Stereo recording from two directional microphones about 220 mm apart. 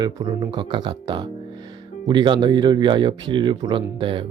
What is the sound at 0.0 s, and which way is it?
Speech, 20° right (ahead or behind).